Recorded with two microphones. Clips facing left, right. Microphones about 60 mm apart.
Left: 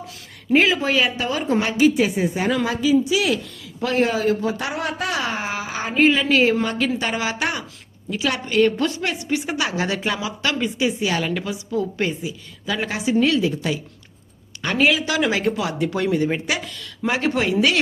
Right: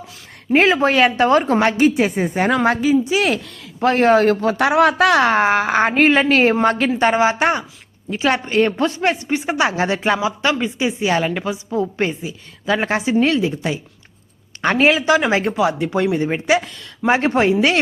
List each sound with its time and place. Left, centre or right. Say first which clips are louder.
0.5 s speech: right 3 dB; right
1.6 s speech: right 2 dB; right
2.9 s a woman's voice: right 2 dB; right
14.6 s a woman's voice: right 4 dB; right